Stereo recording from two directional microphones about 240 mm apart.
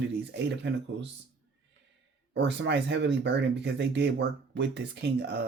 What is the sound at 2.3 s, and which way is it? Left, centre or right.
Speech, right.